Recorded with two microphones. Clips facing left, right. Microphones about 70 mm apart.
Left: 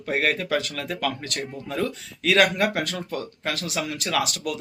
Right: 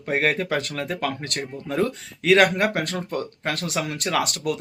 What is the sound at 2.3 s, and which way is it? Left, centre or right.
Speech, right.